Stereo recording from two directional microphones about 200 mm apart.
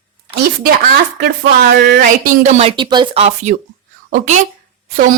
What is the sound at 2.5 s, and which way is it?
Speech, 25° right (ahead or behind).